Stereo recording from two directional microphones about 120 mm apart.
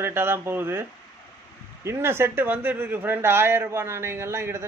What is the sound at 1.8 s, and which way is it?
A man's voice, 20° right (ahead or behind).